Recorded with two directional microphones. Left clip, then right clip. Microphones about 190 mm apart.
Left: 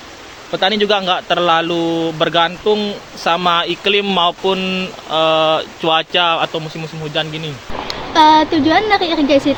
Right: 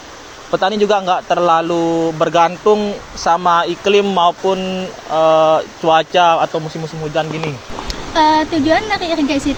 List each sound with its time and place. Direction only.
0.5 s speech: 5° right (ahead or behind); by 6.5 s 15° left (ahead or behind)
6.5 s speech: centre (ahead or behind)
7.9 s speech: 60° right (ahead or behind)